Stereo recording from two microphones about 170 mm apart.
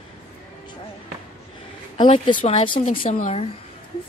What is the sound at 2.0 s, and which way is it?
Speech, 30° left (ahead or behind).